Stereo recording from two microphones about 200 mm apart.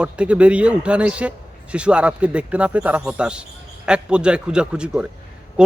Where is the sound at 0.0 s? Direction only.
5° right (ahead or behind).